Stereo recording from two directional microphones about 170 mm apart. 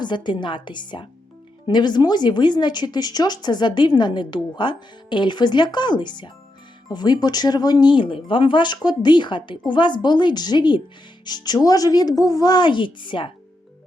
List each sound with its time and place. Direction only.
0.0 s speech: 25° left (ahead or behind)